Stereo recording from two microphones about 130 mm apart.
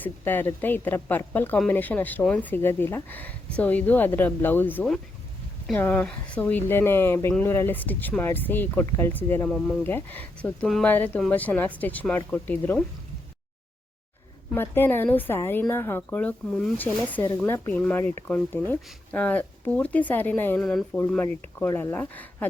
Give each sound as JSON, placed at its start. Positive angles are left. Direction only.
{"t": 0.0, "sound": "a woman's voice", "side_deg": 15}
{"t": 14.5, "sound": "a woman's voice", "side_deg": 15}
{"t": 20.6, "sound": "speech", "side_deg": 5}
{"t": 21.7, "sound": "a woman's voice", "side_deg": 20}